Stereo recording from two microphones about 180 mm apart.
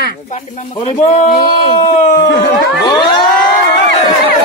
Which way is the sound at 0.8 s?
40° left (ahead or behind).